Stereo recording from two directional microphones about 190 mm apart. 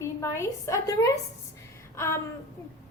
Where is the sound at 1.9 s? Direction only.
15° left (ahead or behind).